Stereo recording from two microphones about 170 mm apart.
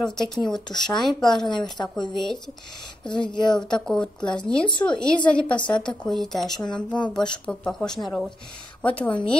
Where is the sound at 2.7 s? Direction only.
25° left (ahead or behind).